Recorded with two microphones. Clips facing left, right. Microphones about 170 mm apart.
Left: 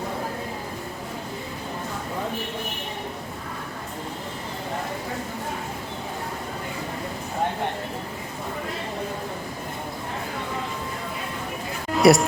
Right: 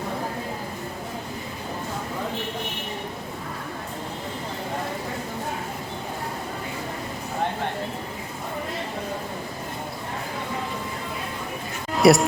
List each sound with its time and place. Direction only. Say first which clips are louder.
11.9 s speech: even; centre (ahead or behind)